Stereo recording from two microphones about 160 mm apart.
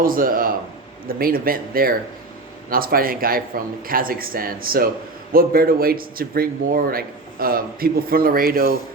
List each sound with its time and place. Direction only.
0.0 s speech: 60° right (ahead or behind)